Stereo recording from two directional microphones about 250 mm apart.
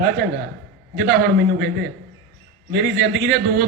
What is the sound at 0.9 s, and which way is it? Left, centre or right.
Speech, right.